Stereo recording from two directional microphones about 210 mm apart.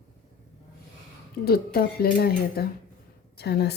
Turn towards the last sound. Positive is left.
turn(degrees=50)  # may be behind; listen again after turning